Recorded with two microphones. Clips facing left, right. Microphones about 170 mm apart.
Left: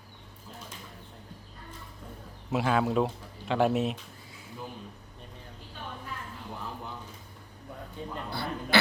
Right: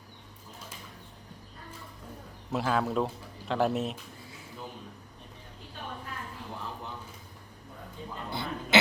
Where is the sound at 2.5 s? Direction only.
Centre (ahead or behind).